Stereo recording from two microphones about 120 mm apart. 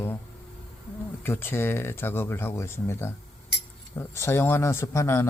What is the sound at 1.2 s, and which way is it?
Speech, 20° left (ahead or behind).